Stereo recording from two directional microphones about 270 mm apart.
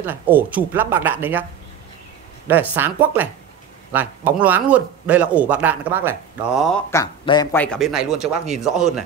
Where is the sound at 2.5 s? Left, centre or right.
Centre.